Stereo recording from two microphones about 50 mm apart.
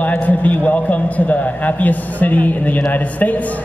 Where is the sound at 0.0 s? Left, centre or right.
Left.